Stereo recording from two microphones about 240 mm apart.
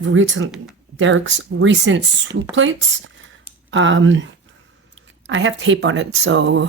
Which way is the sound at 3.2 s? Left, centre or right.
Right.